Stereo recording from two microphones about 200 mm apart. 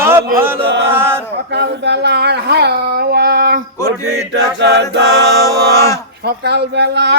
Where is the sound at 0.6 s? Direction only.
60° right (ahead or behind).